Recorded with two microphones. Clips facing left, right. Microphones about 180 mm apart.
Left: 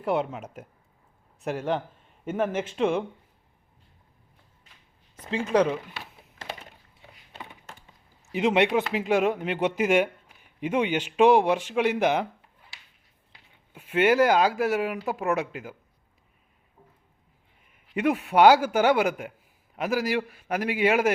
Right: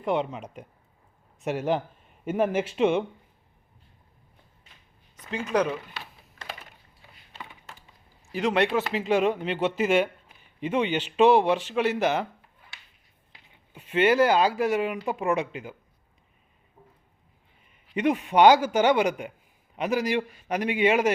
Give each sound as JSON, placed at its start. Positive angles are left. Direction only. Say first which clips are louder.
{"t": 0.0, "sound": "a man's voice", "louder": "even", "side_deg": 5}
{"t": 5.2, "sound": "speech", "louder": "left 3 dB", "side_deg": 30}
{"t": 8.3, "sound": "a man's voice", "louder": "left 2 dB", "side_deg": 20}
{"t": 13.7, "sound": "a man's voice", "louder": "even", "side_deg": 10}
{"t": 17.9, "sound": "a man's voice", "louder": "even", "side_deg": 5}